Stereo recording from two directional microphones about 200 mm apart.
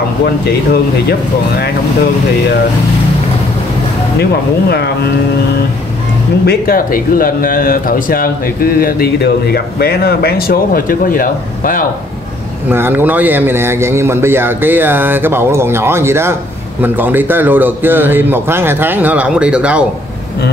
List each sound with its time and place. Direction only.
4.2 s speech: 55° left (ahead or behind)
6.4 s speech: 50° left (ahead or behind)
12.6 s a man's voice: 10° right (ahead or behind)